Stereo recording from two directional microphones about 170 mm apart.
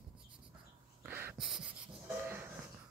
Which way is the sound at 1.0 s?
10° right (ahead or behind).